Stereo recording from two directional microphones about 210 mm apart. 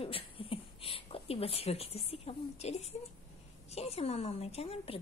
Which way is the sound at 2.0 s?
30° left (ahead or behind).